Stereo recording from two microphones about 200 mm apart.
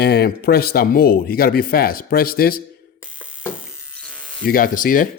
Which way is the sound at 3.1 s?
5° right (ahead or behind).